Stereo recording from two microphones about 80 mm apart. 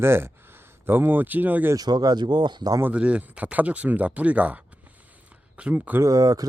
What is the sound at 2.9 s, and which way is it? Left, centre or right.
Speech, centre.